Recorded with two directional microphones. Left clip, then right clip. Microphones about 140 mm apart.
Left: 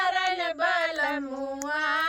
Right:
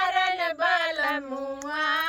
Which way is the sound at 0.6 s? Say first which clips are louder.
Right 1 dB; 30° left (ahead or behind).